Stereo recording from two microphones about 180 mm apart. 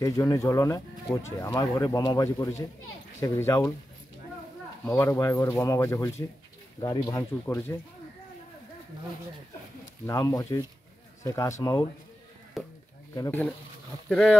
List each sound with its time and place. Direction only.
0.0 s speech: 15° left (ahead or behind)
4.8 s speech: 15° left (ahead or behind)
10.0 s speech: 20° left (ahead or behind)
12.6 s speech: centre (ahead or behind)
13.1 s speech: 15° left (ahead or behind)
14.0 s speech: 5° left (ahead or behind)